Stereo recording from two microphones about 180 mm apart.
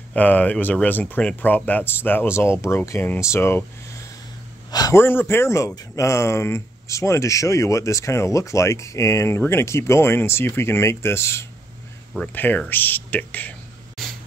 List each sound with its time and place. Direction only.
0.1 s speech: 10° left (ahead or behind)
4.6 s speech: 20° left (ahead or behind); by 14.1 s 5° left (ahead or behind)